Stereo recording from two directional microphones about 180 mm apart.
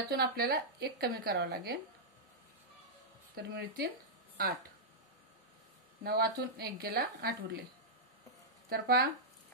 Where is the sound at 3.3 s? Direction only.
60° right (ahead or behind).